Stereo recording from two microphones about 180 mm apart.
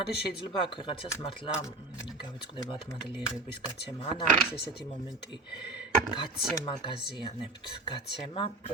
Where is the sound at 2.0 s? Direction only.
25° left (ahead or behind).